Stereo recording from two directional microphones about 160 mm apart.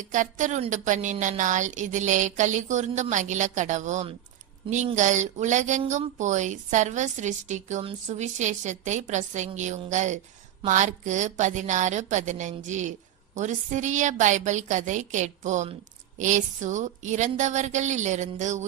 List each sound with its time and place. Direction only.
0.1 s a woman's voice: 50° right (ahead or behind)